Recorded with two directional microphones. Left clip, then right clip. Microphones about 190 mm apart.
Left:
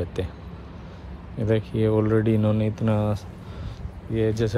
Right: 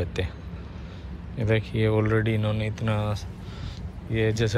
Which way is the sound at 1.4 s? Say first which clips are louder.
Left 2 dB; 20° left (ahead or behind).